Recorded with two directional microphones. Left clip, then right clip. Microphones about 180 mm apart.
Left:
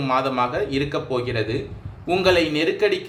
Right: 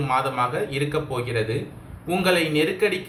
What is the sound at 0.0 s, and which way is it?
Speech, 50° left (ahead or behind).